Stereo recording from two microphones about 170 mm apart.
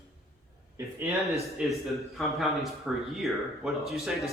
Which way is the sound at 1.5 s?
Centre (ahead or behind).